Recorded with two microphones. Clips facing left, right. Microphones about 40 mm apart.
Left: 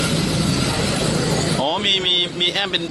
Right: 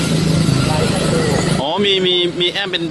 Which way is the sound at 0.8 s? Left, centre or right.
Centre.